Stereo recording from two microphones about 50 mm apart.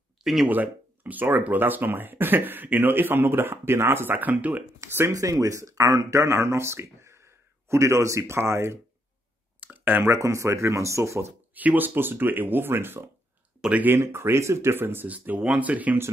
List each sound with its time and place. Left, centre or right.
0.2 s speech: centre
0.5 s speech: right
5.0 s speech: right
8.4 s speech: right
9.6 s a sound: right
10.0 s speech: right
11.5 s speech: right
15.0 s speech: right